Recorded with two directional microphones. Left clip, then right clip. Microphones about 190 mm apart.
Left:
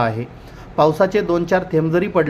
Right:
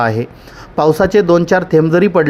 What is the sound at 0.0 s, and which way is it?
Speech, 45° right (ahead or behind).